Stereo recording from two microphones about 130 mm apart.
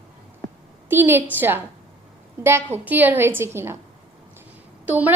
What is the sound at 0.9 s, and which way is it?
A woman's voice, 15° right (ahead or behind).